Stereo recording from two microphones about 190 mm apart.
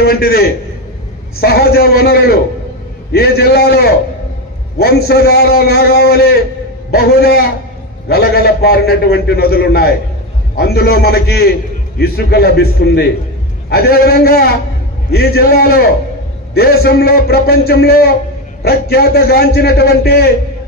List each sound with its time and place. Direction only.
0.0 s a man's voice: 55° left (ahead or behind)